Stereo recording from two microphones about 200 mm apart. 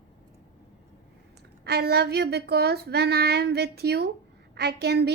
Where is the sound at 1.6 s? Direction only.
55° right (ahead or behind).